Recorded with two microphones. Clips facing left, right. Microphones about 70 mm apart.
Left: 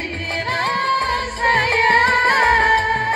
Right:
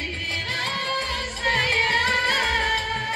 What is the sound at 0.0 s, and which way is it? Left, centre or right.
Music, left.